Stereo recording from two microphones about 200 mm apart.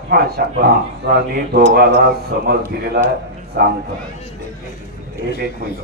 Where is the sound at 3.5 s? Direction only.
50° right (ahead or behind).